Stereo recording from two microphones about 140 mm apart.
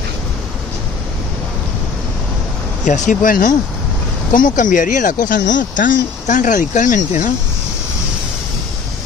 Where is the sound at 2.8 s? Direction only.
60° left (ahead or behind).